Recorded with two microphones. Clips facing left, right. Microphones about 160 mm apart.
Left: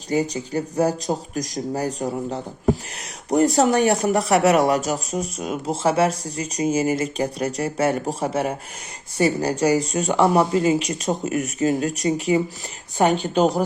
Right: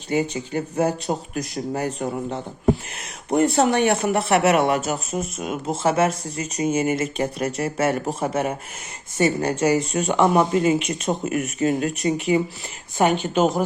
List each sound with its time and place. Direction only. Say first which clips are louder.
0.1 s speech: left 1 dB; 35° left (ahead or behind)